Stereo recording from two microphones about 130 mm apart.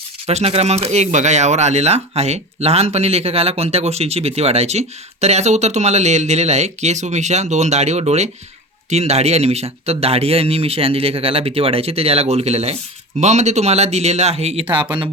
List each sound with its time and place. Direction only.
0.3 s speech: 55° right (ahead or behind)